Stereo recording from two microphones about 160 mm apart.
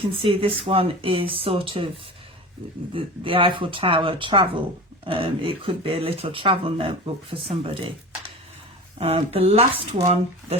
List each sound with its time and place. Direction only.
0.1 s speech: 35° right (ahead or behind)
2.9 s speech: 35° right (ahead or behind)
9.0 s speech: 35° right (ahead or behind)